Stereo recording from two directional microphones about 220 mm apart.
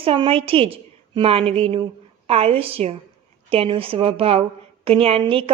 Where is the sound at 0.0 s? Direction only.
25° right (ahead or behind).